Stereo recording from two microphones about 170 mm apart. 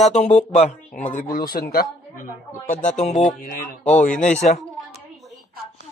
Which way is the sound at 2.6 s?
45° left (ahead or behind).